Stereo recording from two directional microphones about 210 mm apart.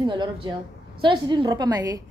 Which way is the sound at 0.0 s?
20° right (ahead or behind).